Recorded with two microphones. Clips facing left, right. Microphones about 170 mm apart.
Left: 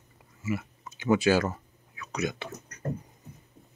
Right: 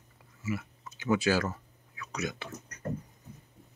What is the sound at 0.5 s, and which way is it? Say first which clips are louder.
Speech: left 3 dB; 20° left (ahead or behind).